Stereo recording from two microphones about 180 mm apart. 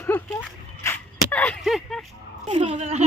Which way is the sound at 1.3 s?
5° left (ahead or behind).